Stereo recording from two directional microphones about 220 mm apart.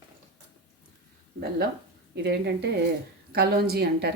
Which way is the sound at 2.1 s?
50° right (ahead or behind).